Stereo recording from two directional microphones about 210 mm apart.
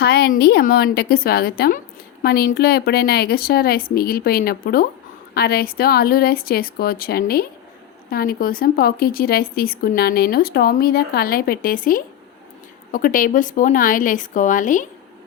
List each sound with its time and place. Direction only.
0.0 s speech: 50° left (ahead or behind)